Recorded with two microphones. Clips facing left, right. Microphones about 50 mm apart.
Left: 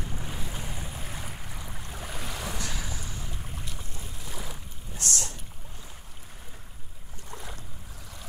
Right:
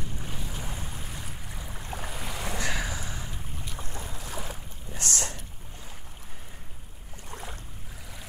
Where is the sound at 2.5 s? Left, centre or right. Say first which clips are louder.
Right 5 dB; right.